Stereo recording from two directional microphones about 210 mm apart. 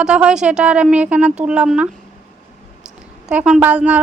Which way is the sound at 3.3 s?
5° right (ahead or behind).